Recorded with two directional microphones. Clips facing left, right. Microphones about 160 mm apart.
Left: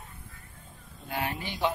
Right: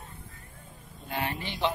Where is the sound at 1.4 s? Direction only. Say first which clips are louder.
Even; 10° left (ahead or behind).